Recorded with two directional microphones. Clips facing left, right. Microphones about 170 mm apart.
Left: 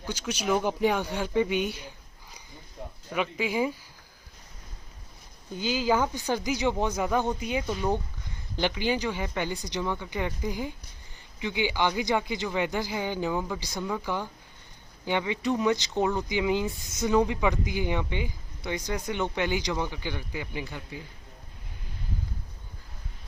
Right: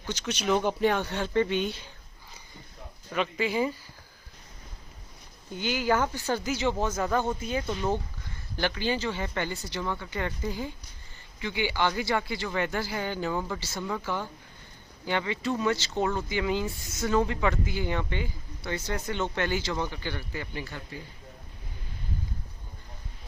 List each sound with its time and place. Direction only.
0.0 s speech: 10° left (ahead or behind)
3.1 s speech: 10° left (ahead or behind)
5.5 s speech: 10° left (ahead or behind)